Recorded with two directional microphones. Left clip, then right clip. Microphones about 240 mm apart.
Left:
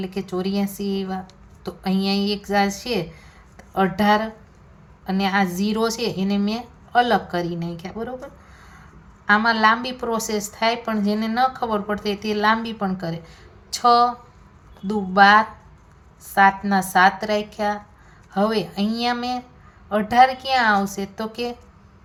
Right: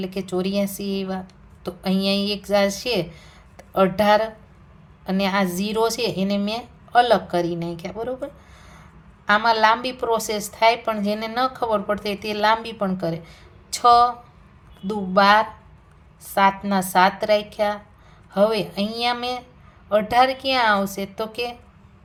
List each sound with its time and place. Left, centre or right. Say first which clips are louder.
0.0 s a woman's voice: right 1 dB; right
16.6 s a woman's voice: left 1 dB; right